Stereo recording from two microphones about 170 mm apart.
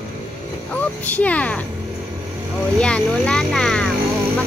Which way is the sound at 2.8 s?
5° left (ahead or behind).